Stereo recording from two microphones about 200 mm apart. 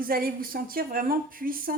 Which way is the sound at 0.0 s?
45° right (ahead or behind).